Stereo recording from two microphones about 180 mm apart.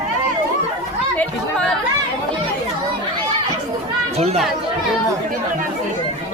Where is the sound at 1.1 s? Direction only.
5° left (ahead or behind).